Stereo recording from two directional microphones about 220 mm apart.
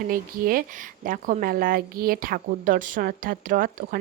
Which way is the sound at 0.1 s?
40° right (ahead or behind).